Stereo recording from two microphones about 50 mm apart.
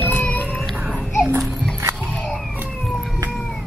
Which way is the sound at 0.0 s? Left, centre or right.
Left.